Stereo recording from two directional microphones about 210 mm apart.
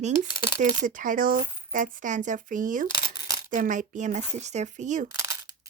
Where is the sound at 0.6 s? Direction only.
40° right (ahead or behind).